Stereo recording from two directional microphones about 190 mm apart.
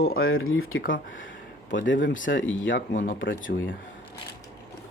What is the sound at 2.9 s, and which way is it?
Speech, 45° left (ahead or behind).